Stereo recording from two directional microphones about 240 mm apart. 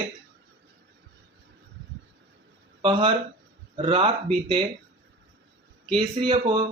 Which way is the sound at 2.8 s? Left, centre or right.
Right.